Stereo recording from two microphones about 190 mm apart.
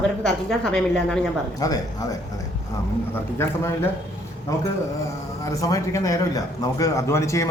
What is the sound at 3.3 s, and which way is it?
Speech, 15° left (ahead or behind).